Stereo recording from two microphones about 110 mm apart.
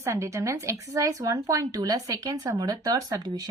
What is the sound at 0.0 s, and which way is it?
Speech, 25° right (ahead or behind).